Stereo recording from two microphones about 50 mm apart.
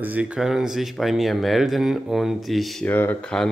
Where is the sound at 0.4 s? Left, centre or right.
Centre.